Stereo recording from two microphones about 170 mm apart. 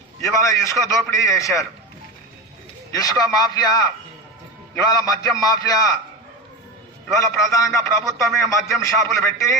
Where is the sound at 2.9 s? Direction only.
20° left (ahead or behind).